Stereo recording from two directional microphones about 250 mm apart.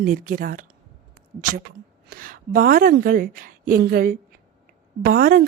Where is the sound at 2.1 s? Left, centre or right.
Right.